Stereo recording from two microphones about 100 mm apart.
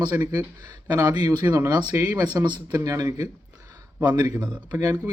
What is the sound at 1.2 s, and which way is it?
A man's voice, 40° right (ahead or behind).